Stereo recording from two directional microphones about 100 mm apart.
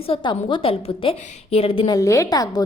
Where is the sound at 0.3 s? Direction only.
55° left (ahead or behind); by 1.9 s 70° left (ahead or behind).